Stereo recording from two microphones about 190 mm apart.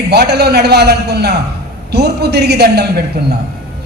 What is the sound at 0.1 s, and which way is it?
A man's voice, 60° right (ahead or behind).